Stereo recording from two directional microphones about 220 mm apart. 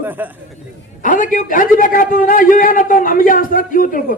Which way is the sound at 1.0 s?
35° left (ahead or behind).